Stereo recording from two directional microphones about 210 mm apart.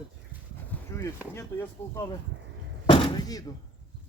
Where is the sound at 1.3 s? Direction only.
10° left (ahead or behind).